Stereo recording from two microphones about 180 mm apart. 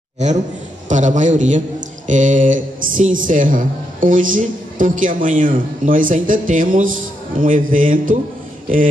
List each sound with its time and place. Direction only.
0.8 s a man's voice: 45° right (ahead or behind)